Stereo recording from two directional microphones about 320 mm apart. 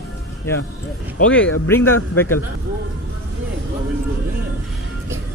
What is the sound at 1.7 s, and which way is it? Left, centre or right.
Speech, centre.